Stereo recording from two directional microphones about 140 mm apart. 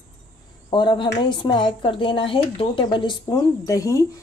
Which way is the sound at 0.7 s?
35° left (ahead or behind).